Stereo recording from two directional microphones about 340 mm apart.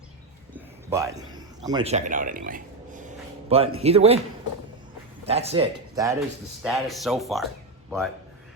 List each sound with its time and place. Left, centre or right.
0.9 s a man's voice: centre
5.2 s a man's voice: centre